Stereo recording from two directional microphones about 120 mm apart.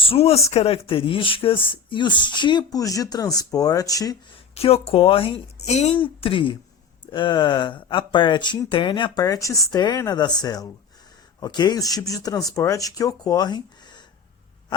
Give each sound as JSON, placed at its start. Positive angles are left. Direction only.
{"t": 0.0, "sound": "speech", "side_deg": 55}
{"t": 4.5, "sound": "speech", "side_deg": 55}
{"t": 5.6, "sound": "speech", "side_deg": 70}
{"t": 6.0, "sound": "speech", "side_deg": 50}
{"t": 9.2, "sound": "speech", "side_deg": 25}